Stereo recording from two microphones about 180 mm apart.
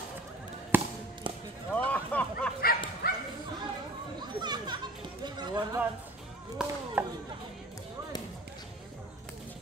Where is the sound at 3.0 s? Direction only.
60° left (ahead or behind).